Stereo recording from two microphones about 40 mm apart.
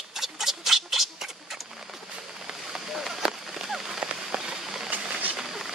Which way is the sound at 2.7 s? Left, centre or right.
Centre.